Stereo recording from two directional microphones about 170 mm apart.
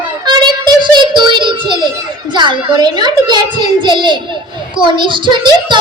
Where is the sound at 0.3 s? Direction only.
25° right (ahead or behind).